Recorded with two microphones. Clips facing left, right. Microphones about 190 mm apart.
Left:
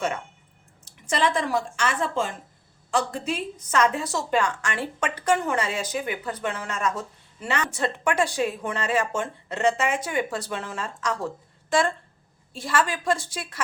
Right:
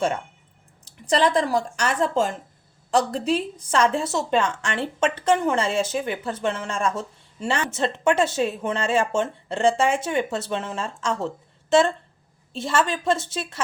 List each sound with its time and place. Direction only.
1.0 s a woman's voice: 35° right (ahead or behind)
12.5 s a woman's voice: 25° right (ahead or behind)